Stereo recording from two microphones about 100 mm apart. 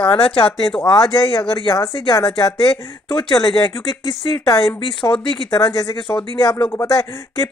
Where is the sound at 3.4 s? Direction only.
35° left (ahead or behind).